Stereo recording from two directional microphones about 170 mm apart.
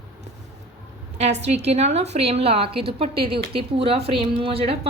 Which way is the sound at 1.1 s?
40° right (ahead or behind).